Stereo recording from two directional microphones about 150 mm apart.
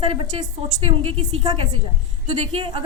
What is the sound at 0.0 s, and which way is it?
A woman's voice, 35° right (ahead or behind).